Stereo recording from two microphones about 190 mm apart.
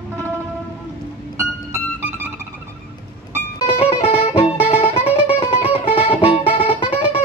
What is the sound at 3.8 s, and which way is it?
Music, 30° left (ahead or behind).